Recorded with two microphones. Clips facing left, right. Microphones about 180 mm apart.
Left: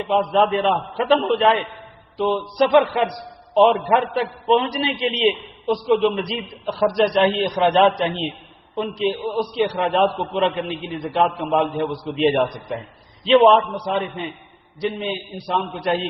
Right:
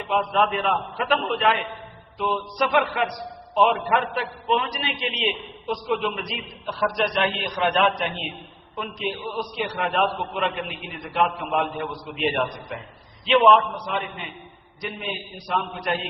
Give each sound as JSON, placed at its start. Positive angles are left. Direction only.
{"t": 0.1, "sound": "a man's voice", "side_deg": 30}